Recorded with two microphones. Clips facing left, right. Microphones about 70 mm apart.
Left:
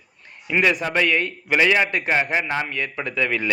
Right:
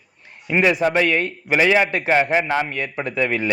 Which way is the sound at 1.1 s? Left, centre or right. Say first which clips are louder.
Right 1 dB; right.